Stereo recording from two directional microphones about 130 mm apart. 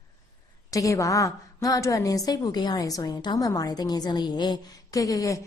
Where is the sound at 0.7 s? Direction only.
25° left (ahead or behind).